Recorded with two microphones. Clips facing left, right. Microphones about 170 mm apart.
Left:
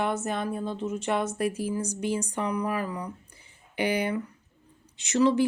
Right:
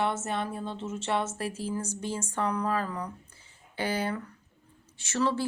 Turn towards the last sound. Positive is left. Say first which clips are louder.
# left 6 dB
turn(degrees=15)  # may be behind; listen again after turning